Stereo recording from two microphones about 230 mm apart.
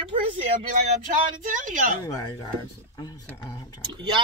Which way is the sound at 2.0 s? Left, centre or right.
Centre.